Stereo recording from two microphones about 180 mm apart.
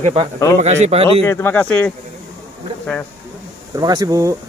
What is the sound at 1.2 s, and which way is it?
Speech, 15° left (ahead or behind).